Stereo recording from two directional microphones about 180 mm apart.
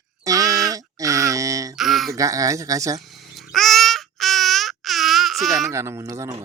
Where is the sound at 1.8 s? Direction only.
Centre (ahead or behind).